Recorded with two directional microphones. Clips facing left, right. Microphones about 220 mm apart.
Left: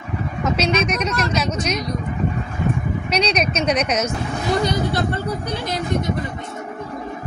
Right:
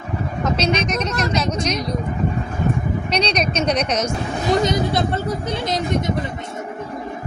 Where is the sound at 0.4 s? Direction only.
5° left (ahead or behind).